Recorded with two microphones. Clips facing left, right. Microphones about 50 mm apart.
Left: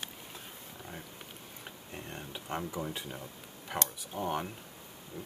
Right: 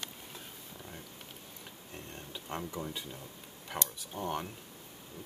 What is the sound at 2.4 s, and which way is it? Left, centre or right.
Speech, centre.